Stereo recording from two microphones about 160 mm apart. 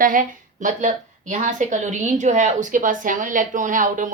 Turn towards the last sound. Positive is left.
turn(degrees=-55)  # may be behind; listen again after turning